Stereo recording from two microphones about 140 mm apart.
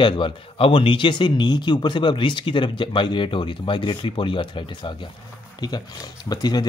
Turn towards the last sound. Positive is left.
turn(degrees=30)  # may be behind; listen again after turning